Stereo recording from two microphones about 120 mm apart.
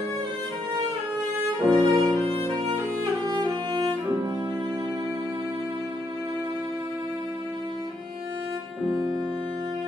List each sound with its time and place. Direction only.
1.6 s violin: 5° left (ahead or behind)
3.3 s music: 40° right (ahead or behind)